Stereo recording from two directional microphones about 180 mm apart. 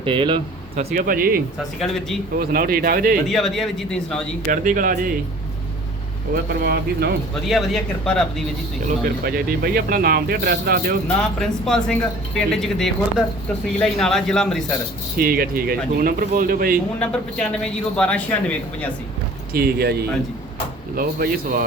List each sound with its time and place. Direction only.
0.0 s speech: 30° right (ahead or behind)
0.9 s speech: 50° right (ahead or behind)
1.8 s a man's voice: centre (ahead or behind)
2.5 s speech: 55° right (ahead or behind)
3.2 s a man's voice: centre (ahead or behind)
4.4 s speech: 50° right (ahead or behind)
6.3 s speech: 60° right (ahead or behind)
7.4 s a man's voice: centre (ahead or behind)
9.2 s speech: 55° right (ahead or behind)
11.3 s a man's voice: 5° left (ahead or behind)
15.2 s speech: 55° right (ahead or behind)
17.0 s speech: 5° left (ahead or behind)
19.5 s speech: 60° right (ahead or behind)